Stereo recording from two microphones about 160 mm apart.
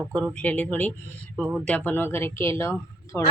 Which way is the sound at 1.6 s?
10° left (ahead or behind).